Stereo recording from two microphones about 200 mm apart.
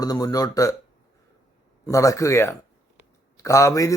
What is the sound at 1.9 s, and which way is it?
A man's voice, 15° left (ahead or behind).